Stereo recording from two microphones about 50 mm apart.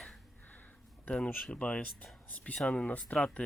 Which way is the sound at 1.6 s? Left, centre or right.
Left.